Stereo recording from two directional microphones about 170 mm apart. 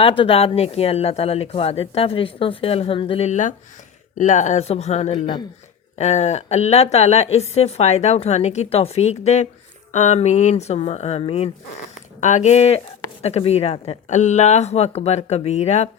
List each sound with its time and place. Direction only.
0.0 s speech: 35° left (ahead or behind)